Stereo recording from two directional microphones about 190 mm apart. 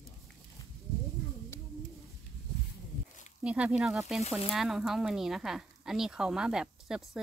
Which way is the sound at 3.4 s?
5° right (ahead or behind).